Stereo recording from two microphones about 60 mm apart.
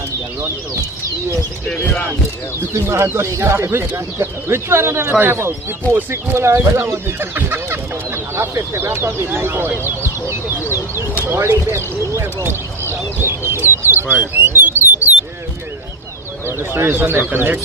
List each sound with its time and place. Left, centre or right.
2.7 s speech: right
7.3 s speech: right
12.9 s duck: right
13.7 s bird: right
16.5 s speech: right